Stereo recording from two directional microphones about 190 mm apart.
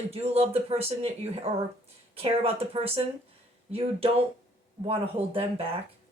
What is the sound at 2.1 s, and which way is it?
Speech, 30° right (ahead or behind).